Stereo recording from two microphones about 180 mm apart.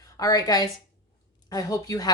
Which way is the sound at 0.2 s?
20° left (ahead or behind).